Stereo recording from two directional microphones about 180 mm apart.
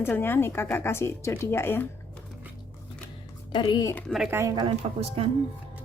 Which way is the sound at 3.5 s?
25° left (ahead or behind).